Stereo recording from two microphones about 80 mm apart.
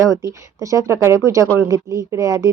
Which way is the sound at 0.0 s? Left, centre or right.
Right.